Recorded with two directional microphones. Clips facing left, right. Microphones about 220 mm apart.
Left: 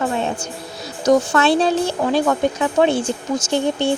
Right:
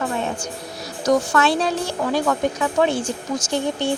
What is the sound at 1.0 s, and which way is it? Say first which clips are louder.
Speech: left 3 dB; 25° left (ahead or behind).